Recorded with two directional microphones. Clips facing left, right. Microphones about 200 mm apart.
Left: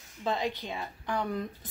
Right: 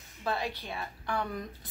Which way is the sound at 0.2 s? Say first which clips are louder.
Left 3 dB; 20° left (ahead or behind).